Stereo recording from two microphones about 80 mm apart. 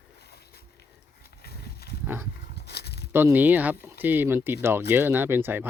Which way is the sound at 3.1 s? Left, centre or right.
Right.